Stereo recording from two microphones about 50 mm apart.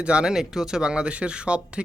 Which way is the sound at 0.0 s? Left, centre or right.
Centre.